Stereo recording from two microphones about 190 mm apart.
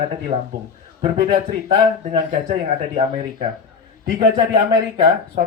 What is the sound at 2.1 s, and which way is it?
Speech, 40° right (ahead or behind).